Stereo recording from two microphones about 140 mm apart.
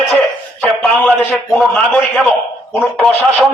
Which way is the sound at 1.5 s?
5° left (ahead or behind).